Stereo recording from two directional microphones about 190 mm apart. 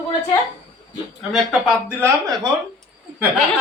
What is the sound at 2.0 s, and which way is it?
Speech, 15° right (ahead or behind).